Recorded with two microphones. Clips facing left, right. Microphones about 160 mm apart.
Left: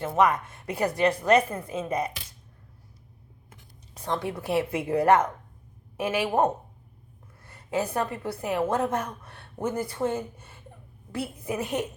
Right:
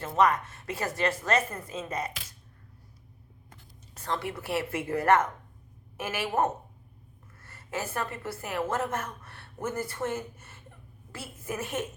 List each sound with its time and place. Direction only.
0.0 s a woman's voice: 10° left (ahead or behind)
3.9 s a woman's voice: 15° left (ahead or behind)